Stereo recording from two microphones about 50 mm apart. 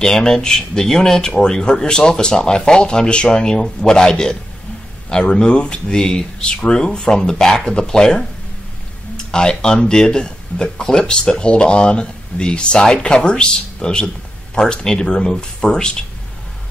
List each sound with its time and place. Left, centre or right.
0.0 s speech: centre